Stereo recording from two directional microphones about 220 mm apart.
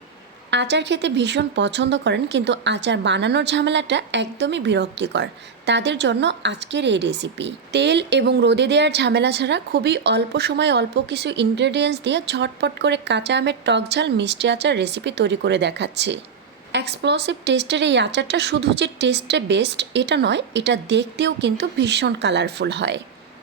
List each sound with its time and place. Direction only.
0.5 s speech: 50° right (ahead or behind)